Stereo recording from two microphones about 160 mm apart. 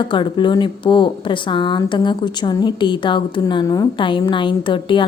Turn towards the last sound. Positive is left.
turn(degrees=30)  # may be behind; listen again after turning